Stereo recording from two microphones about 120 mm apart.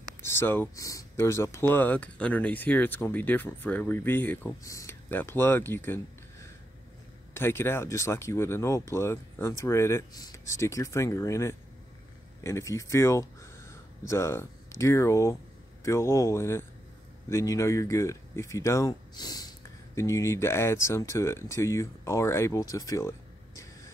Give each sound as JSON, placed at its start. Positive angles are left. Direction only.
{"t": 0.2, "sound": "speech", "side_deg": 20}
{"t": 7.3, "sound": "speech", "side_deg": 20}